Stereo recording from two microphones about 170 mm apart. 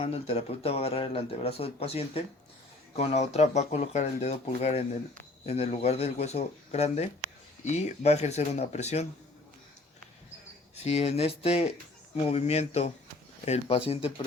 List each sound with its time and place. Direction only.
0.0 s speech: 35° left (ahead or behind)
10.8 s speech: 35° left (ahead or behind)